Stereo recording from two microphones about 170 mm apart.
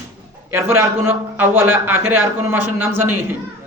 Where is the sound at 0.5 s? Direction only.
15° right (ahead or behind).